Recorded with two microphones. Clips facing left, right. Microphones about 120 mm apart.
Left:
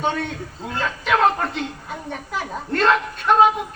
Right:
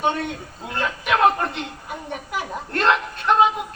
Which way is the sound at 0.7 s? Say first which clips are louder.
Left 1 dB; 10° right (ahead or behind).